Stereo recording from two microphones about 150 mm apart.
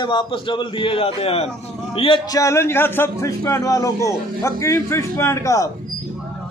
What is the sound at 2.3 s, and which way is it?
A man's voice, 20° left (ahead or behind).